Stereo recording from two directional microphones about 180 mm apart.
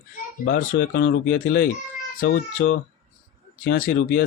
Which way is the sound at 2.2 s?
90° left.